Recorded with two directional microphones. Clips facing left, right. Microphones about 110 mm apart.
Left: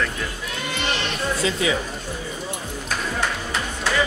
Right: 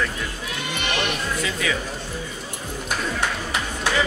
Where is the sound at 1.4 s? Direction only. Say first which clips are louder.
Left 6 dB; 25° left (ahead or behind).